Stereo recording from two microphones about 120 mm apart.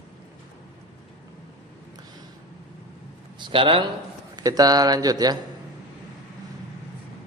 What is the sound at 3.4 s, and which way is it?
Speech, 45° right (ahead or behind).